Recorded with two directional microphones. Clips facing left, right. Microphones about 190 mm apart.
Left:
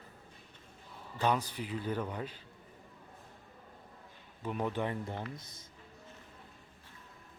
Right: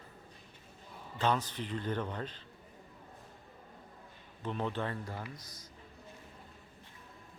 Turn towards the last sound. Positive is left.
turn(degrees=25)  # may be behind; listen again after turning